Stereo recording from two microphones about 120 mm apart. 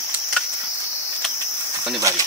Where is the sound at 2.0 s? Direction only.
30° right (ahead or behind).